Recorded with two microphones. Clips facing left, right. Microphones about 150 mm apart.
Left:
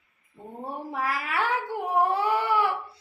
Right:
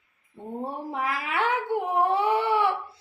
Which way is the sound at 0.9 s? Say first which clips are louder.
Even; 20° right (ahead or behind).